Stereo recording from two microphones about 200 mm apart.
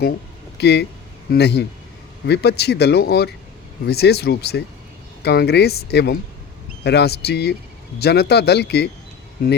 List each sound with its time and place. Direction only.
0.6 s speech: 55° left (ahead or behind)